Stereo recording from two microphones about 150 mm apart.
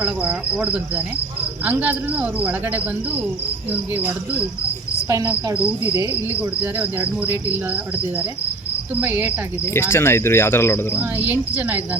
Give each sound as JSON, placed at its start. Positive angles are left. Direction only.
{"t": 0.0, "sound": "cricket", "side_deg": -10}
{"t": 5.0, "sound": "cricket", "side_deg": -15}
{"t": 9.7, "sound": "speech", "side_deg": 15}
{"t": 11.2, "sound": "cricket", "side_deg": -10}